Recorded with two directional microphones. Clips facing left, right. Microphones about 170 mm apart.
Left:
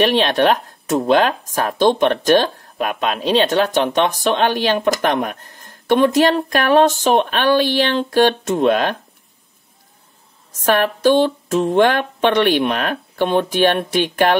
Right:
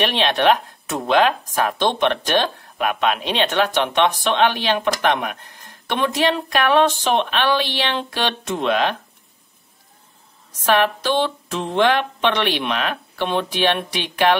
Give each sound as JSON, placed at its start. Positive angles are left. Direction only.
{"t": 0.0, "sound": "speech", "side_deg": 45}
{"t": 10.6, "sound": "speech", "side_deg": 45}